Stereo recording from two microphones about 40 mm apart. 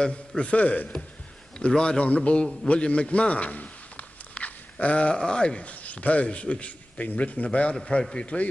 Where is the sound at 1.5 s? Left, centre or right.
Left.